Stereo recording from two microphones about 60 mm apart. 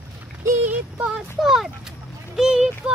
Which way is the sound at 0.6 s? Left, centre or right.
Right.